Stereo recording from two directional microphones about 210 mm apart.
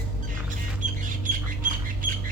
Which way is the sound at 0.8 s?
65° left (ahead or behind).